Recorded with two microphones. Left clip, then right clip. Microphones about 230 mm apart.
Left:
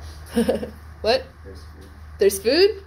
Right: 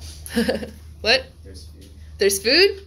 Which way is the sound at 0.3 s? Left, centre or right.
Right.